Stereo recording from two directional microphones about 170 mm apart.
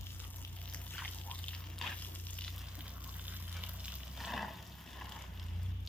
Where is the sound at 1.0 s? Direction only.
5° left (ahead or behind).